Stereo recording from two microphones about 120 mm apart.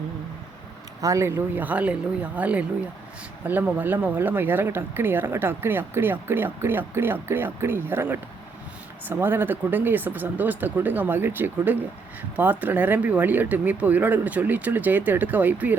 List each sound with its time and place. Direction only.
1.0 s speech: 25° right (ahead or behind)